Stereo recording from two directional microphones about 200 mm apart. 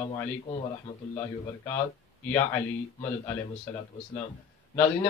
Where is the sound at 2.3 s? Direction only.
10° left (ahead or behind).